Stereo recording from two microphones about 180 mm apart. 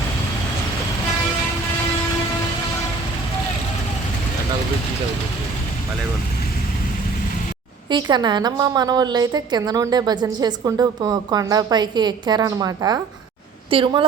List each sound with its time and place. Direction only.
7.9 s a woman's voice: 25° right (ahead or behind)